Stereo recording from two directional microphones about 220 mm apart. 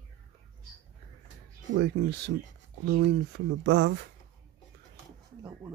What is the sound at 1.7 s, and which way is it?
Speech, 50° right (ahead or behind).